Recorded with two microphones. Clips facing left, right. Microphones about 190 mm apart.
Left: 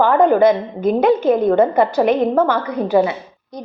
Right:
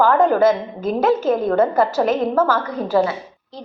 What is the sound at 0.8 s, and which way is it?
A woman's voice, 5° right (ahead or behind).